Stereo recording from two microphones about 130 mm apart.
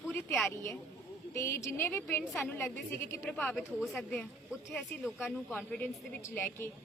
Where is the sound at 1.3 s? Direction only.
20° left (ahead or behind).